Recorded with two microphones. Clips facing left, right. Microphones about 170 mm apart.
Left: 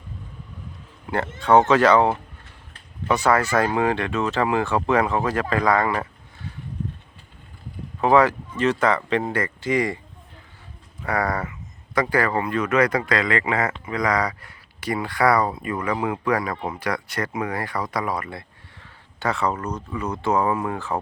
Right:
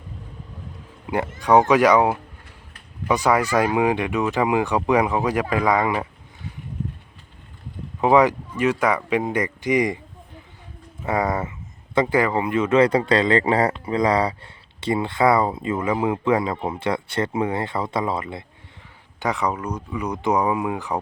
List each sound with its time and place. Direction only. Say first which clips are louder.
1.0 s speech: right 1 dB; 15° right (ahead or behind)
8.0 s speech: right 1 dB; 15° right (ahead or behind)
11.0 s speech: right 2 dB; 20° right (ahead or behind)